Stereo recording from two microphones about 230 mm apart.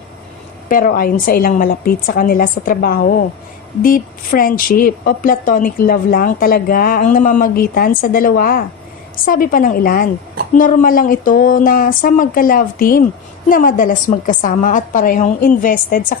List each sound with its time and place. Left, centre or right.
0.7 s a woman's voice: left